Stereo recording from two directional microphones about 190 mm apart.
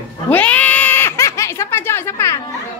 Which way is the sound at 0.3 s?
10° left (ahead or behind).